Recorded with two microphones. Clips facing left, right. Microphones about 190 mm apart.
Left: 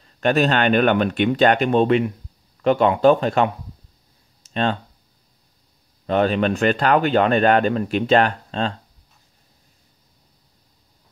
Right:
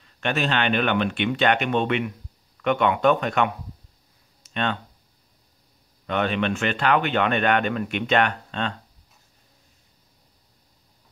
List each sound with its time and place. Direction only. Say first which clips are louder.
0.0 s speech: left 7 dB; 40° left (ahead or behind)
6.0 s speech: left 5 dB; 35° left (ahead or behind)